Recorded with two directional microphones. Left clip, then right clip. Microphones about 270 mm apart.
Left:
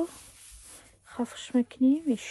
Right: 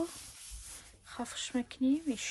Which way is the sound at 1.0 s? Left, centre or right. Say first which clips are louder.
Left 4 dB; centre.